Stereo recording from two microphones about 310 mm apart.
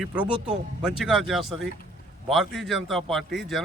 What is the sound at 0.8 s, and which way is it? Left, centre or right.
Speech, centre.